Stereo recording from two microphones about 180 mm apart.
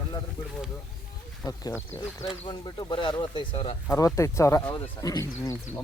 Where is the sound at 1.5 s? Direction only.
15° left (ahead or behind).